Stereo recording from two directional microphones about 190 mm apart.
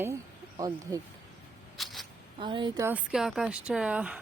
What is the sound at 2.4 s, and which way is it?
Speech, 25° right (ahead or behind).